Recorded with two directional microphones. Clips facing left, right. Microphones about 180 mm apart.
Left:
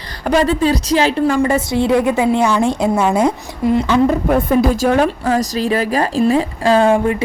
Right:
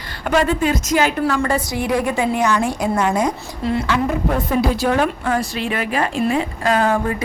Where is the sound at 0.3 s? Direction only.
35° left (ahead or behind).